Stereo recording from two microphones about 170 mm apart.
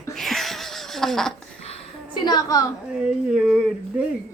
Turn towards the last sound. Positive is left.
turn(degrees=-5)  # may be behind; listen again after turning